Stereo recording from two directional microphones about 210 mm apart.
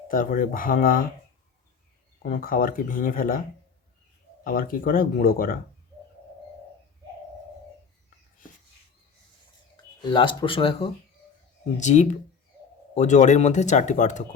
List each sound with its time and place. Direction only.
0.1 s speech: 40° left (ahead or behind)
2.2 s speech: 40° left (ahead or behind)
4.4 s speech: 40° left (ahead or behind)
10.0 s speech: 20° left (ahead or behind)
11.8 s speech: 35° left (ahead or behind)